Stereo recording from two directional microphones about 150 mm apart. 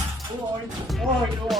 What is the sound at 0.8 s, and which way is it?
Speech, centre (ahead or behind).